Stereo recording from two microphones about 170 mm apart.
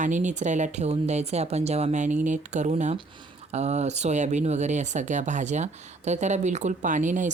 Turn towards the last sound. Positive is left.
turn(degrees=-45)  # may be behind; listen again after turning